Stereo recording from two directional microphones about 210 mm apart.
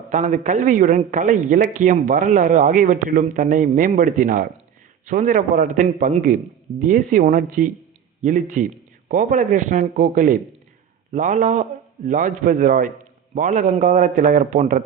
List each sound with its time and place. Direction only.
0.1 s a man's voice: 35° right (ahead or behind)